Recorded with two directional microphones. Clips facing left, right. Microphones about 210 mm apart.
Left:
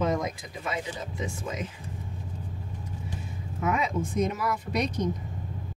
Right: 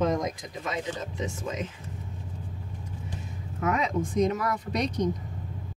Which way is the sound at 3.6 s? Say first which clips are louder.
Right 1 dB; 5° left (ahead or behind).